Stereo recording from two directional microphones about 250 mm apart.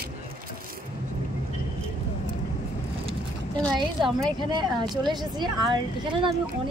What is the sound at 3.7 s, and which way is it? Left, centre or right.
A woman's voice, centre.